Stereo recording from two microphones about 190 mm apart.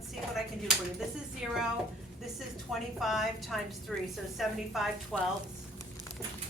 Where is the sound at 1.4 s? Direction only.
5° right (ahead or behind).